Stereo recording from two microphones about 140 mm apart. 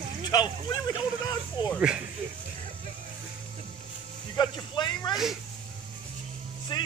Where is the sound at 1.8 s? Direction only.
10° right (ahead or behind).